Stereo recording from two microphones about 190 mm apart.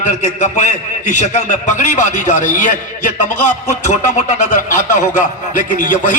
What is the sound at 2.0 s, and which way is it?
A man's voice, 40° left (ahead or behind).